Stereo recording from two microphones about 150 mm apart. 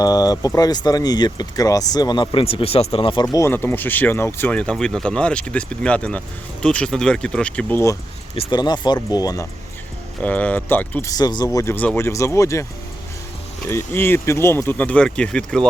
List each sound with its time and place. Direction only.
0.0 s speech: 25° left (ahead or behind)
3.3 s speech: 15° left (ahead or behind)
8.4 s speech: 30° left (ahead or behind)
10.2 s speech: 10° left (ahead or behind)
11.1 s speech: 30° left (ahead or behind)
13.7 s speech: 15° left (ahead or behind)